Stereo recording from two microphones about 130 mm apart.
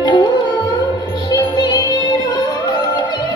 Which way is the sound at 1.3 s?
30° left (ahead or behind).